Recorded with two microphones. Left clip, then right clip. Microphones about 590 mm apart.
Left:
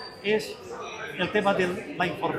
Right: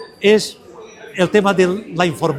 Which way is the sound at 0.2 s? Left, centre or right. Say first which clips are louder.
Right 13 dB; right.